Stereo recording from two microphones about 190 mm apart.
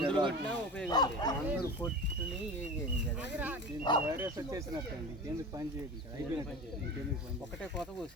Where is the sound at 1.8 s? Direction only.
10° left (ahead or behind).